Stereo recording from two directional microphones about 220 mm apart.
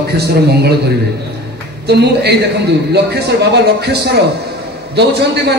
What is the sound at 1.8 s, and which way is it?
A man's voice, 50° right (ahead or behind).